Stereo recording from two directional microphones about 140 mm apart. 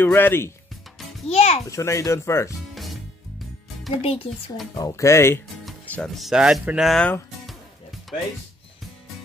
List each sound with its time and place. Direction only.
0.0 s speech: 15° left (ahead or behind)
1.3 s a child's voice: 50° left (ahead or behind)
1.7 s speech: 20° left (ahead or behind)
4.0 s speech: 40° left (ahead or behind)
4.7 s speech: 25° left (ahead or behind)
5.9 s music: 10° left (ahead or behind)
6.1 s speech: 5° right (ahead or behind)